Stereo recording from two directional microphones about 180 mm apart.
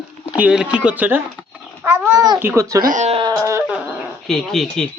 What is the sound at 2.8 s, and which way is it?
Speech, 45° right (ahead or behind).